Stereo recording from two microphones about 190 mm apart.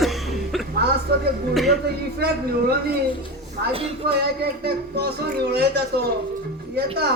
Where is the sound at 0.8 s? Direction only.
55° right (ahead or behind).